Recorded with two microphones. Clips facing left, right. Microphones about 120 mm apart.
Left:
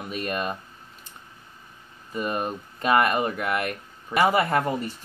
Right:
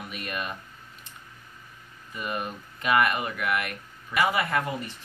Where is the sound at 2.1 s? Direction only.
40° left (ahead or behind).